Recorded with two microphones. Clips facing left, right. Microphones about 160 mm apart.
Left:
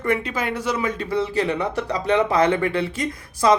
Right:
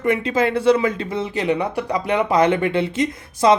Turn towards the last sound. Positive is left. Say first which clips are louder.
# right 3 dB
turn(degrees=-20)  # may be behind; listen again after turning